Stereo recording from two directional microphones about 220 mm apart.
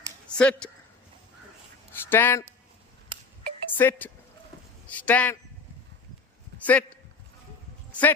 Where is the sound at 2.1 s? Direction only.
10° left (ahead or behind).